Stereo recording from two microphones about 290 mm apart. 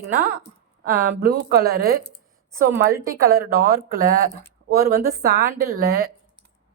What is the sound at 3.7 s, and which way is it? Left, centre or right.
A woman's voice, right.